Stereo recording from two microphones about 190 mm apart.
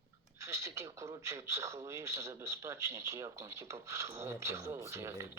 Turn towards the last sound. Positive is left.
turn(degrees=-15)  # may be behind; listen again after turning